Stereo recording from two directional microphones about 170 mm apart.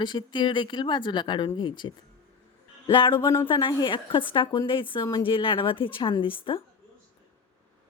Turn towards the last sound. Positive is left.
turn(degrees=30)  # may be behind; listen again after turning